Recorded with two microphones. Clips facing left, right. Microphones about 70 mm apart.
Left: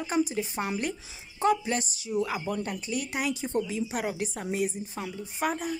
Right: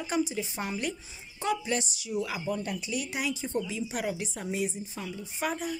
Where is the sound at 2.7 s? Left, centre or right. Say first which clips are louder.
Left 1 dB; left.